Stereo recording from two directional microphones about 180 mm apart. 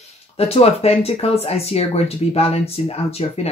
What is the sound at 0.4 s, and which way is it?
Speech, 35° left (ahead or behind).